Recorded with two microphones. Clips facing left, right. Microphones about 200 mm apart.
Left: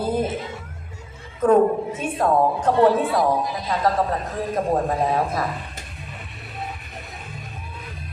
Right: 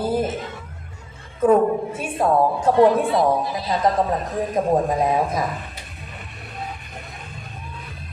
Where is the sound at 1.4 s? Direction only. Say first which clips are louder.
Even; 10° right (ahead or behind).